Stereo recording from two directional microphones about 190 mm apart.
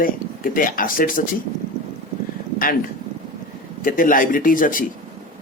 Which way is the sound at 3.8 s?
45° left (ahead or behind).